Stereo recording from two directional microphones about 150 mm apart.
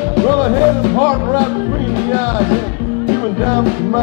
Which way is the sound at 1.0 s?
25° right (ahead or behind).